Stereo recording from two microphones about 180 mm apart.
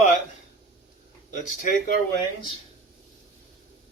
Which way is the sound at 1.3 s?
45° left (ahead or behind).